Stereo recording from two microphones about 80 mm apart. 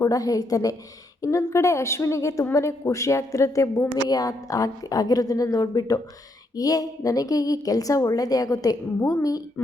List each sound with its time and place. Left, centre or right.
0.0 s a woman's voice: left